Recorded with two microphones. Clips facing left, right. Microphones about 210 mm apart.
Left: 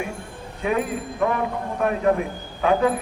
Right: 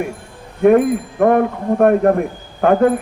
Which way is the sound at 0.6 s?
55° right (ahead or behind).